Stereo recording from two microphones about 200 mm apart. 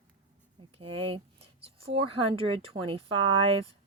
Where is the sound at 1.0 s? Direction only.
30° right (ahead or behind).